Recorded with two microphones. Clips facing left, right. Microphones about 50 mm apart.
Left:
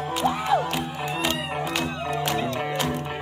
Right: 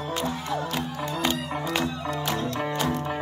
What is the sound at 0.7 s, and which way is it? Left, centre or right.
Music, left.